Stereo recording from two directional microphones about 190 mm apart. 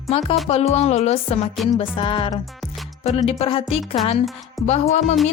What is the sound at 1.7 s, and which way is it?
Music, 25° left (ahead or behind).